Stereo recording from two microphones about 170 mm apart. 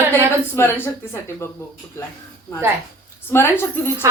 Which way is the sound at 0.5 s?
15° left (ahead or behind).